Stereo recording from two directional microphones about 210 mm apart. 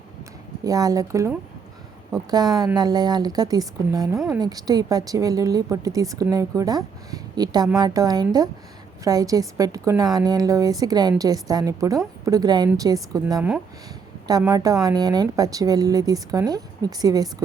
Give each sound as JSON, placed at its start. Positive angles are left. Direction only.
{"t": 0.6, "sound": "a woman's voice", "side_deg": -15}